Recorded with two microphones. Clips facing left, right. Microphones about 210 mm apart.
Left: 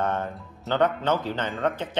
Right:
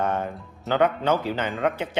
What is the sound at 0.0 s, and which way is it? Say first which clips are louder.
Speech: right 1 dB; 10° right (ahead or behind).